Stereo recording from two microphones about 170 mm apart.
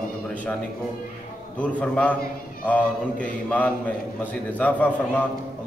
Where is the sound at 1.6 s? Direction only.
5° left (ahead or behind).